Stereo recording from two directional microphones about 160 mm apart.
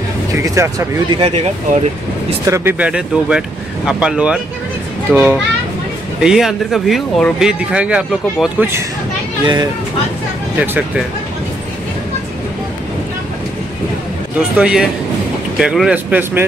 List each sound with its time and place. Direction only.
0.3 s speech: 20° right (ahead or behind)
1.2 s speech: 40° right (ahead or behind)
2.4 s speech: 15° right (ahead or behind)
9.4 s speech: 30° right (ahead or behind)
10.6 s speech: 10° right (ahead or behind)
14.6 s speech: 5° right (ahead or behind)